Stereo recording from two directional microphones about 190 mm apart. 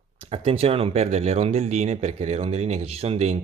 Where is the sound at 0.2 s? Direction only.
30° right (ahead or behind).